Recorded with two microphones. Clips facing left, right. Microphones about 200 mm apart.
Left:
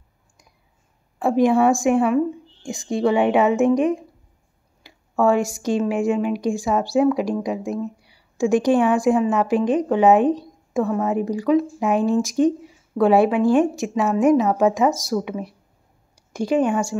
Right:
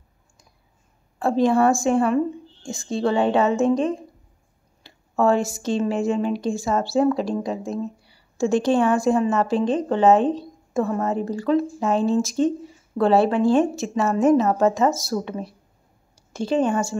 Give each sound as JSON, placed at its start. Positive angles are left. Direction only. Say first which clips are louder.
{"t": 1.2, "sound": "speech", "louder": "left 2 dB", "side_deg": 15}
{"t": 2.6, "sound": "a woman's voice", "louder": "left 3 dB", "side_deg": 15}